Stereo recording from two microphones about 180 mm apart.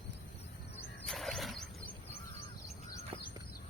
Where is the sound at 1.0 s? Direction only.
Centre (ahead or behind).